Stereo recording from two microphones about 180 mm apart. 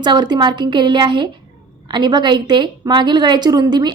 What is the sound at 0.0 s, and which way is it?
A woman's voice, 25° right (ahead or behind).